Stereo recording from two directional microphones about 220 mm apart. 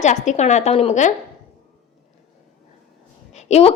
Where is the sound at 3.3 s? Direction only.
30° left (ahead or behind).